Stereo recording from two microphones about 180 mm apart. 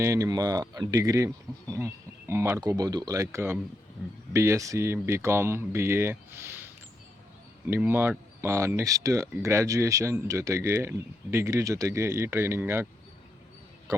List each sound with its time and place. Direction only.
0.0 s speech: 15° right (ahead or behind)
7.7 s speech: 10° right (ahead or behind)